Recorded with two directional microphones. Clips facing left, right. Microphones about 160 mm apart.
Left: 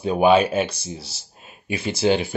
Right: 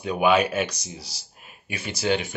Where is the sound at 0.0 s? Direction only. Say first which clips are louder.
Left 4 dB; 30° left (ahead or behind).